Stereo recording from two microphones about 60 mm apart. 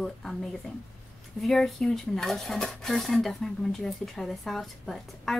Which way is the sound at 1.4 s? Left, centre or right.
Centre.